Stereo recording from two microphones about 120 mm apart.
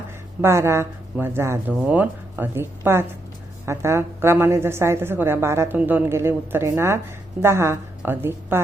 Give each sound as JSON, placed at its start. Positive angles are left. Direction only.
{"t": 0.4, "sound": "a woman's voice", "side_deg": -20}